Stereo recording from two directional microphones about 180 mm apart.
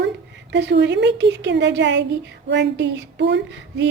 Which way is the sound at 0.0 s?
75° right (ahead or behind).